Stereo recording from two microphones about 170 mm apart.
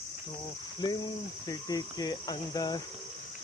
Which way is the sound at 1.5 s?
25° left (ahead or behind).